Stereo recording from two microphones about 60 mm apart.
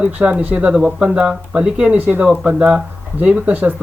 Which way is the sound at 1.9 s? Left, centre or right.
Right.